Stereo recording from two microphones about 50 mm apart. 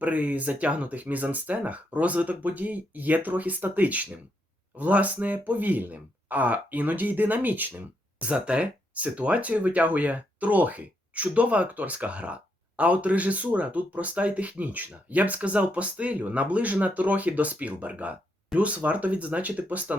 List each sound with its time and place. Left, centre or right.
0.0 s speech: right
8.2 s speech: right